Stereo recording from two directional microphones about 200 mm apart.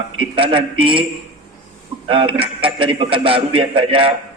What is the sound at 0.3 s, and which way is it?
Speech, 25° right (ahead or behind).